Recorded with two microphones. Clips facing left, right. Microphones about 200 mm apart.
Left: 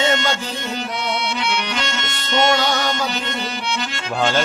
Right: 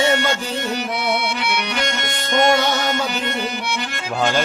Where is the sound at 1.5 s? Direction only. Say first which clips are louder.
Right 1 dB; 10° right (ahead or behind).